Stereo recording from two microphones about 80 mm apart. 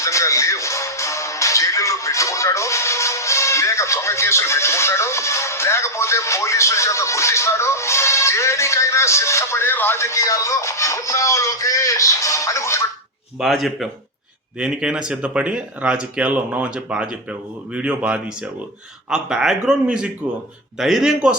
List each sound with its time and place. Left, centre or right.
0.0 s speech: left
13.4 s a man's voice: centre
14.6 s speech: centre